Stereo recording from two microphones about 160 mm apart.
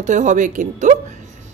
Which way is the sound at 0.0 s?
50° right (ahead or behind).